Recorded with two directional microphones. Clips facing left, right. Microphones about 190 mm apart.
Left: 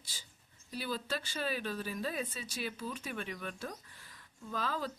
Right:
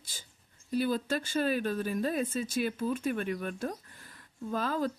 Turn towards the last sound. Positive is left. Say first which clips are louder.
# right 6 dB
turn(degrees=-50)  # may be behind; listen again after turning